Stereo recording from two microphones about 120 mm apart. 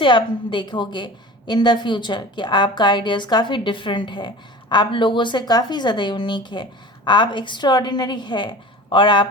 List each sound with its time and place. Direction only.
0.0 s a woman's voice: 40° left (ahead or behind)